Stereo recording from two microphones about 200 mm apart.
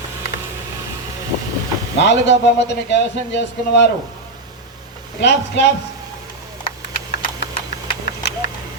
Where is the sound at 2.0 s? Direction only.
60° left (ahead or behind).